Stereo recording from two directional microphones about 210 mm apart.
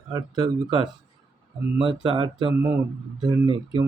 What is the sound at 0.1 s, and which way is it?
Speech, 20° right (ahead or behind).